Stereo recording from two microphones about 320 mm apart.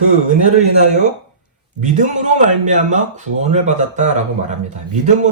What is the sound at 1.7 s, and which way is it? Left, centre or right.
A man's voice, right.